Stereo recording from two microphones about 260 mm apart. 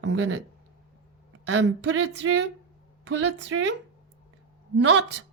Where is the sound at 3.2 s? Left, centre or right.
Right.